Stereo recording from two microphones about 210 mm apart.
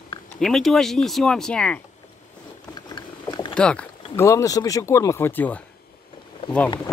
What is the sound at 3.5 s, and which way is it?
Speech, 5° left (ahead or behind).